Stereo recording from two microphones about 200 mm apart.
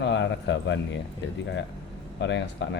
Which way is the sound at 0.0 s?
60° left (ahead or behind).